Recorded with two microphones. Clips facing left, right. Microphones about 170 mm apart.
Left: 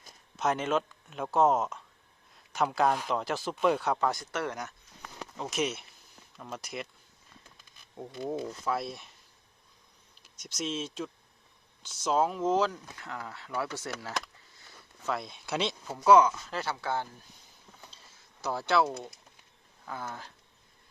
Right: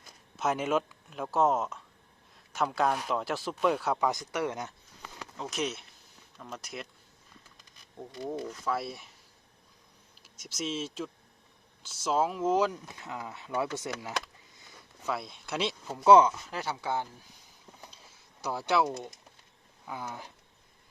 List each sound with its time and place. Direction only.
0.3 s speech: 5° right (ahead or behind)
5.4 s speech: centre (ahead or behind)
8.6 s speech: 5° right (ahead or behind)
10.2 s speech: 5° right (ahead or behind)
15.0 s speech: 5° right (ahead or behind)
16.0 s speech: 25° right (ahead or behind)
16.5 s speech: 15° right (ahead or behind)
18.4 s speech: 15° right (ahead or behind)